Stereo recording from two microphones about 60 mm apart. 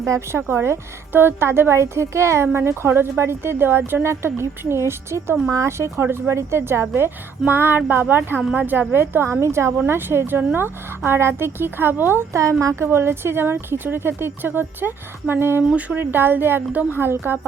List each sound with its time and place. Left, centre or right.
0.0 s a woman's voice: right
12.3 s speech: right